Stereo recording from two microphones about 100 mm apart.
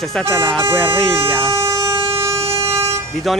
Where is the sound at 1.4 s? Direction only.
30° right (ahead or behind).